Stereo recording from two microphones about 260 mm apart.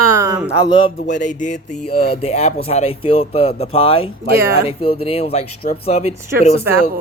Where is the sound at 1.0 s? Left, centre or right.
Left.